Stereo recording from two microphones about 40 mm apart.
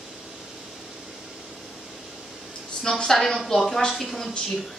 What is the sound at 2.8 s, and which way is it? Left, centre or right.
A woman's voice, centre.